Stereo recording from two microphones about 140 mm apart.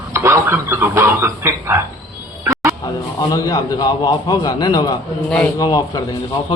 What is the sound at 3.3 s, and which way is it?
A man's voice, 25° left (ahead or behind).